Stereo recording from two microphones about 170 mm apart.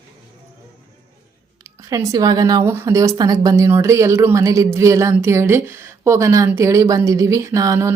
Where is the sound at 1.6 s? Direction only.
20° right (ahead or behind).